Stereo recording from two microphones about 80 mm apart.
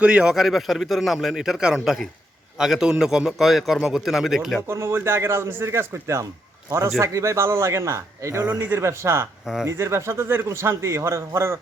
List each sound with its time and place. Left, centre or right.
0.0 s a man's voice: centre
4.7 s a man's voice: right
8.4 s a man's voice: right